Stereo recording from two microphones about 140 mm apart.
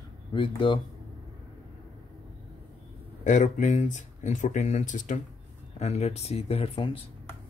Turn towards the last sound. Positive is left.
turn(degrees=40)  # may be behind; listen again after turning